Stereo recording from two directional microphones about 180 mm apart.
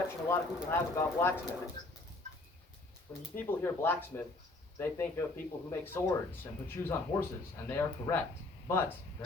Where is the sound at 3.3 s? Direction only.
10° left (ahead or behind).